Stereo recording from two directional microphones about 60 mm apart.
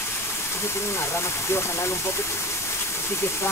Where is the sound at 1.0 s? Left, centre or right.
Left.